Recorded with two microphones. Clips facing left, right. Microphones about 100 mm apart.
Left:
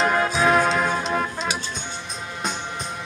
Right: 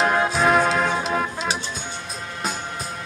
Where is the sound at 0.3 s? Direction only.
Centre (ahead or behind).